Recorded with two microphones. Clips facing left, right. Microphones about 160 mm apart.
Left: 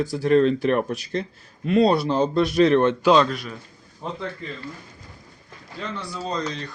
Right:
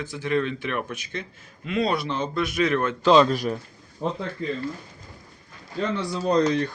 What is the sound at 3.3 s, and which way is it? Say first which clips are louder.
Speech: right 6 dB; 35° right (ahead or behind).